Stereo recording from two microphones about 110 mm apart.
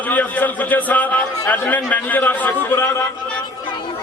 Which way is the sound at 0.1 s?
15° left (ahead or behind).